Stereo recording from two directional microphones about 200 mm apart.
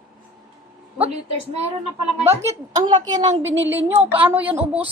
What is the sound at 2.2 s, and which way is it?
A woman's voice, 15° right (ahead or behind).